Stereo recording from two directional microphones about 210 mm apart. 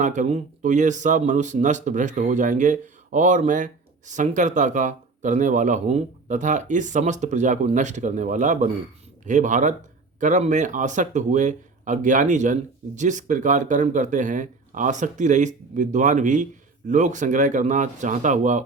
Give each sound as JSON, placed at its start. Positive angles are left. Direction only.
{"t": 0.0, "sound": "speech", "side_deg": -35}